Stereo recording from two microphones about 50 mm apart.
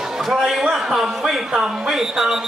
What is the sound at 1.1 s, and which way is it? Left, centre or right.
Speech, centre.